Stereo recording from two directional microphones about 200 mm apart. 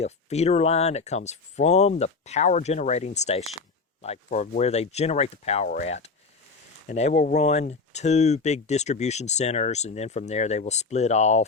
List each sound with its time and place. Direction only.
0.0 s speech: 30° left (ahead or behind)